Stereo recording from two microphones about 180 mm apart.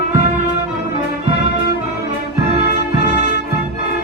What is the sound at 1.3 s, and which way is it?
Music, 65° left (ahead or behind).